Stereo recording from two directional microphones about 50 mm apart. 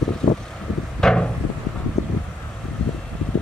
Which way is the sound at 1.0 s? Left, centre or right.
Centre.